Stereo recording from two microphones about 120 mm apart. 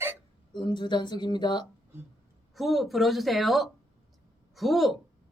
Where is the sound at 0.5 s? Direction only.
40° left (ahead or behind).